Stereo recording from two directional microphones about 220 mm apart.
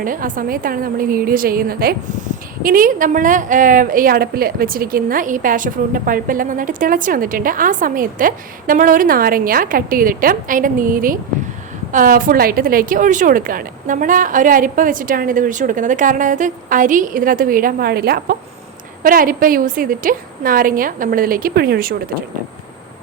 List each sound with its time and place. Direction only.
0.0 s a woman's voice: 40° right (ahead or behind)